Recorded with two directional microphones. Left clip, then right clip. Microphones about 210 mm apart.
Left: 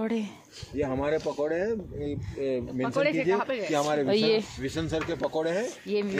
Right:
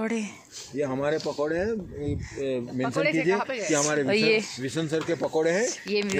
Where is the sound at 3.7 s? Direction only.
40° right (ahead or behind).